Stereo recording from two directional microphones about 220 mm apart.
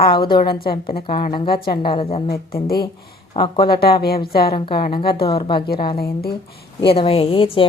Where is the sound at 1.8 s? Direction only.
20° left (ahead or behind).